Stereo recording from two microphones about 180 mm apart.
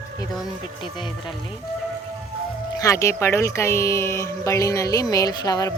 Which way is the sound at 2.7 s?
15° left (ahead or behind).